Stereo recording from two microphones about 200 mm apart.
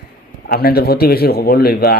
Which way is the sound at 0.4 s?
50° left (ahead or behind).